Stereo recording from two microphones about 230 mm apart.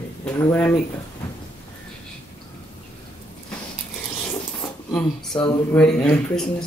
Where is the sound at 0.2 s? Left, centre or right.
Centre.